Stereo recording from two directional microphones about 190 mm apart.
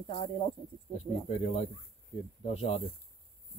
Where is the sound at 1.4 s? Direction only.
35° left (ahead or behind).